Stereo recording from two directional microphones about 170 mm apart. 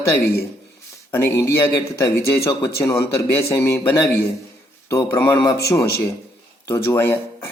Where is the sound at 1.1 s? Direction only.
15° left (ahead or behind).